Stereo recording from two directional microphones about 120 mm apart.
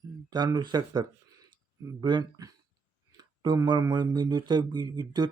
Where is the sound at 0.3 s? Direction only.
35° right (ahead or behind).